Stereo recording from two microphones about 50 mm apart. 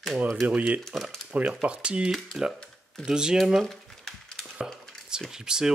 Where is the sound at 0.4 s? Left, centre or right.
Right.